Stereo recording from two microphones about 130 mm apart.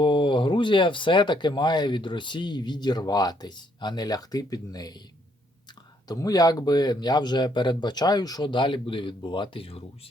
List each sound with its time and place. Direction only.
0.0 s speech: 40° left (ahead or behind)
6.1 s speech: 30° left (ahead or behind); by 9.8 s 45° left (ahead or behind)